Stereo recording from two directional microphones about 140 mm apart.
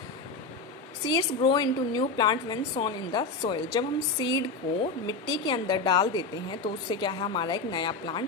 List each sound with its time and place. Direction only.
1.0 s a woman's voice: 30° left (ahead or behind)